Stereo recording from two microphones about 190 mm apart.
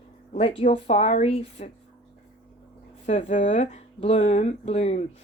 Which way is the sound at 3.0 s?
40° left (ahead or behind).